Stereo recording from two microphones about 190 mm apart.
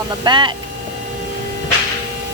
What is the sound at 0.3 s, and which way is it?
Speech, 25° right (ahead or behind).